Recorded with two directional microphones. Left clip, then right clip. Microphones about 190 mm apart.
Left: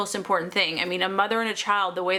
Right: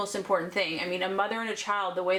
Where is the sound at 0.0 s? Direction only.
25° left (ahead or behind).